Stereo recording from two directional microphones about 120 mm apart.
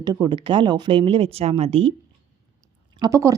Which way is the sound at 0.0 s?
35° right (ahead or behind).